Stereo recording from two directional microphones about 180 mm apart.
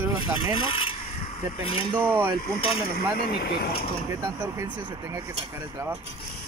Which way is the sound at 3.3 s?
65° left (ahead or behind).